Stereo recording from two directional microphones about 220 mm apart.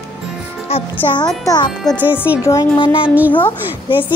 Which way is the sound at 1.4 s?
15° left (ahead or behind).